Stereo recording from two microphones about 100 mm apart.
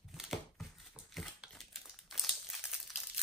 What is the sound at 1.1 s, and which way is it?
Crumpling, centre (ahead or behind).